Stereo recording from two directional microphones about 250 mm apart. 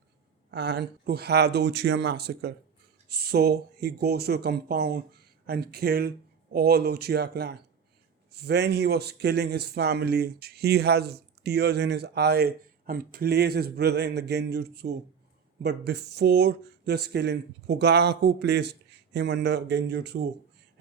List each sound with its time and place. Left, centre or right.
0.5 s speech: right